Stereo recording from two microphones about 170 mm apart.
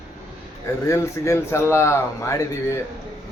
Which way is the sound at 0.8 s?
15° left (ahead or behind).